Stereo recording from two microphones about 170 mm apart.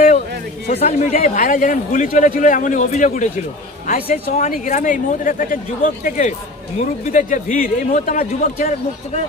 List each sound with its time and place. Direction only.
0.7 s a man's voice: 40° left (ahead or behind)